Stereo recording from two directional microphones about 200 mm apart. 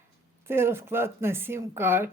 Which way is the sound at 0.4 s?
10° right (ahead or behind).